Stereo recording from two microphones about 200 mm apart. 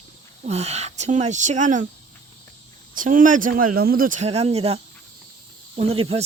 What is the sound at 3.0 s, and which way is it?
Speech, 40° right (ahead or behind).